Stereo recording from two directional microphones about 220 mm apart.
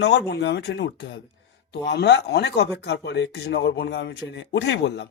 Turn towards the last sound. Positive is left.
turn(degrees=55)  # may be behind; listen again after turning